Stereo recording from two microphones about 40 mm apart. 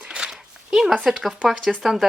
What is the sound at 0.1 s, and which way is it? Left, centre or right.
Dog, right.